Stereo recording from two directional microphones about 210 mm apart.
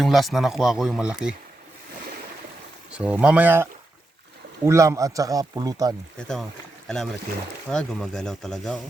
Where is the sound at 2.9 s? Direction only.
5° right (ahead or behind).